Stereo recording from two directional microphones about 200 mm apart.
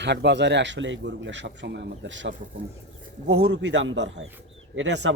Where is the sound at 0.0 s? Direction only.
60° right (ahead or behind).